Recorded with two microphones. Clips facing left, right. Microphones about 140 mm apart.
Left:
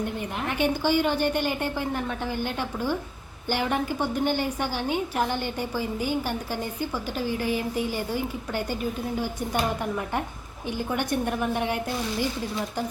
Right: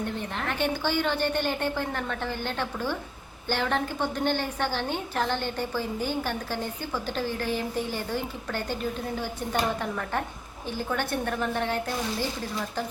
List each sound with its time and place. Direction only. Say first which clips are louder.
0.0 s a woman's voice: left 2 dB; 10° left (ahead or behind)
10.7 s a woman's voice: left 2 dB; 15° left (ahead or behind)